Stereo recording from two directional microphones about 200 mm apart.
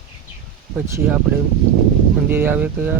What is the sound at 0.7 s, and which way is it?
Speech, 10° right (ahead or behind).